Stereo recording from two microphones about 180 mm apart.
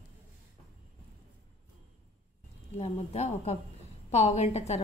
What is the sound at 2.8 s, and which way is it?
A woman's voice, 35° left (ahead or behind).